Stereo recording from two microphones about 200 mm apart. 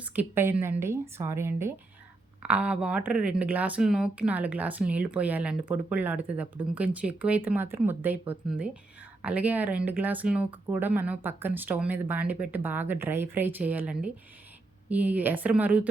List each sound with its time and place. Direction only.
0.0 s speech: 10° right (ahead or behind)